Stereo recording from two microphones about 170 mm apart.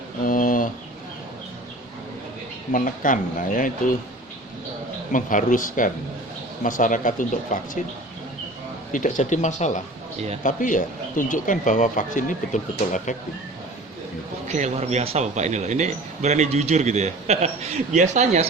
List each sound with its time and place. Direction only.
0.3 s a sound: 50° left (ahead or behind)
2.7 s speech: 50° left (ahead or behind)
5.1 s speech: 50° left (ahead or behind)
8.9 s speech: 50° left (ahead or behind)
14.4 s speech: 40° right (ahead or behind)